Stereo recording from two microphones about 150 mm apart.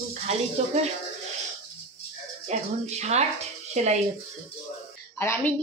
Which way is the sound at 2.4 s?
50° right (ahead or behind).